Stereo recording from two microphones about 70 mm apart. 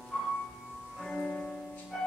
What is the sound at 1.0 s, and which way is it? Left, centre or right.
Music, centre.